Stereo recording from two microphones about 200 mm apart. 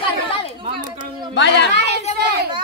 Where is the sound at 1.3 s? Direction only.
60° left (ahead or behind).